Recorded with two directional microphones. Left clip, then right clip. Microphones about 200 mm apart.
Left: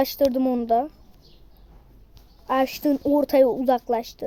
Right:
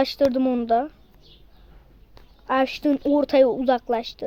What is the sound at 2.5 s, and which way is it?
A woman's voice, centre (ahead or behind).